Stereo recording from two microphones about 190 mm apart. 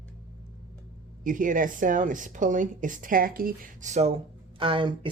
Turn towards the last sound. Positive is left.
turn(degrees=-25)  # may be behind; listen again after turning